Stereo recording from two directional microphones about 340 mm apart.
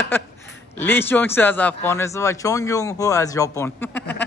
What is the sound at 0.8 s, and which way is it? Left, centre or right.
Speech, centre.